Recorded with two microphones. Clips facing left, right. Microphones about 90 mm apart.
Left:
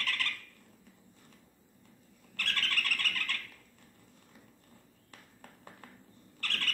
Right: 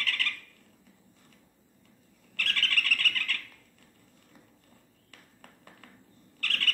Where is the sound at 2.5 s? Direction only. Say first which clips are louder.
Right 3 dB; 35° left (ahead or behind).